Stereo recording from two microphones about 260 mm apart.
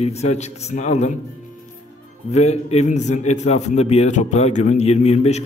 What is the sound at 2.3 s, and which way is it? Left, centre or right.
A man's voice, left.